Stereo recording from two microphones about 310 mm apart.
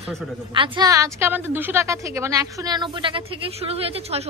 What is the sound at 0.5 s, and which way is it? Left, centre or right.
A woman's voice, centre.